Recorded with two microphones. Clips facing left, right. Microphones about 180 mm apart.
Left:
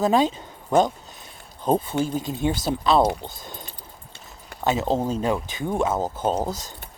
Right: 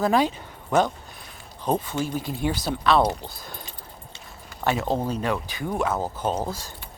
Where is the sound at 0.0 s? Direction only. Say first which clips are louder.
Left 2 dB; 20° left (ahead or behind).